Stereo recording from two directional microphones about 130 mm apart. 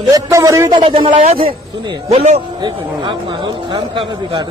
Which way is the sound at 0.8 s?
40° right (ahead or behind).